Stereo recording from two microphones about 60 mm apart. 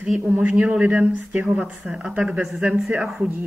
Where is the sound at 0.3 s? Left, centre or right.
Right.